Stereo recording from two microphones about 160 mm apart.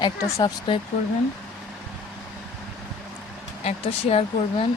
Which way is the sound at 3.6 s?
40° left (ahead or behind).